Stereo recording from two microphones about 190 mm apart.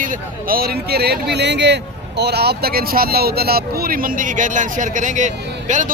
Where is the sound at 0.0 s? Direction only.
45° right (ahead or behind).